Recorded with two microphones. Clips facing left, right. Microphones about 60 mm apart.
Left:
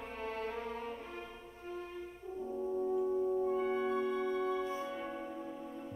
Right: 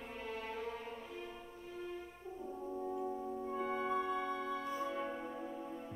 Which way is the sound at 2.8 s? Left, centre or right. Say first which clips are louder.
Left 8 dB; centre.